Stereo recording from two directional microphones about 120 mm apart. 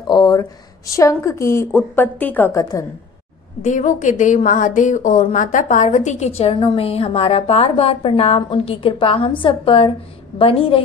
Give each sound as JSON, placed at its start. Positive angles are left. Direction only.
{"t": 0.0, "sound": "speech", "side_deg": 35}
{"t": 0.4, "sound": "speech", "side_deg": 25}
{"t": 3.6, "sound": "a woman's voice", "side_deg": 90}
{"t": 6.6, "sound": "a woman's voice", "side_deg": 50}